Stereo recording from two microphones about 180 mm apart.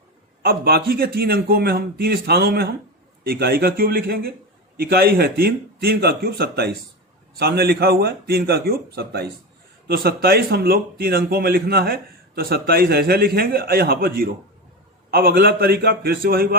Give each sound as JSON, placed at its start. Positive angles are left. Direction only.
{"t": 0.4, "sound": "speech", "side_deg": -60}